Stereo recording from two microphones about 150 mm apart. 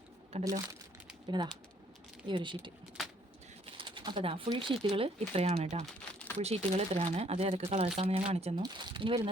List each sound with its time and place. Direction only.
0.3 s speech: 40° right (ahead or behind)
2.2 s speech: 30° right (ahead or behind)
3.8 s speech: 35° right (ahead or behind)
5.8 s crumpling: 10° left (ahead or behind)
6.4 s speech: 45° right (ahead or behind)
8.6 s speech: 30° right (ahead or behind)